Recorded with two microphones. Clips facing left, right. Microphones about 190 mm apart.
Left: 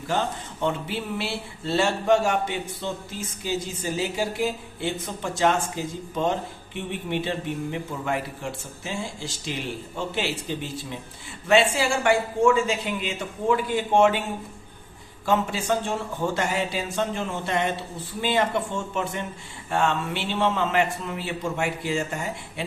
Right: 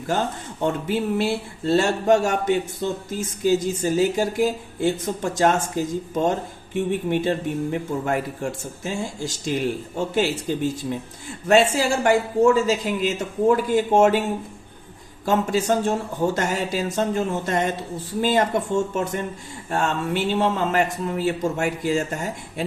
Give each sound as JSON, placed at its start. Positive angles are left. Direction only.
{"t": 0.6, "sound": "speech", "side_deg": -45}
{"t": 15.3, "sound": "speech", "side_deg": -40}